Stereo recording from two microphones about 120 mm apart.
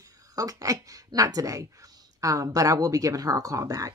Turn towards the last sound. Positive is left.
turn(degrees=-30)  # may be behind; listen again after turning